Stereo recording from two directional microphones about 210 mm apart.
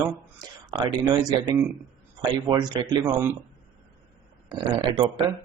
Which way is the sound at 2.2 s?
25° right (ahead or behind).